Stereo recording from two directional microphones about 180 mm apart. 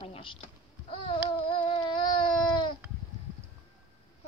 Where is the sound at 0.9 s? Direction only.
30° left (ahead or behind).